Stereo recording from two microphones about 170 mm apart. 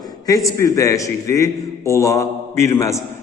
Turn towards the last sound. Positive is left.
turn(degrees=15)  # may be behind; listen again after turning